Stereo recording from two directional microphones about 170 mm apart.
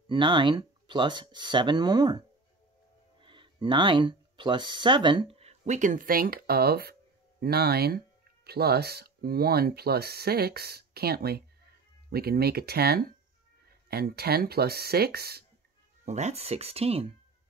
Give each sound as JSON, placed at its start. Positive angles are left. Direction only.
{"t": 0.1, "sound": "speech", "side_deg": -30}
{"t": 16.1, "sound": "speech", "side_deg": -40}